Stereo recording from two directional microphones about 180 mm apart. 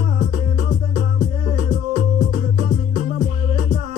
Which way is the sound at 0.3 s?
45° right (ahead or behind).